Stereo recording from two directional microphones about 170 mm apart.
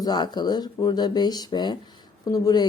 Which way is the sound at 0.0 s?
25° left (ahead or behind).